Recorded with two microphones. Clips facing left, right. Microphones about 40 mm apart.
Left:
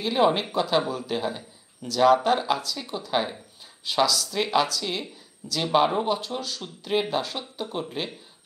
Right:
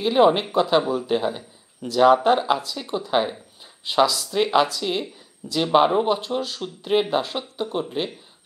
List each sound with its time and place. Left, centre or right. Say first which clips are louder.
0.0 s speech: right 5 dB; centre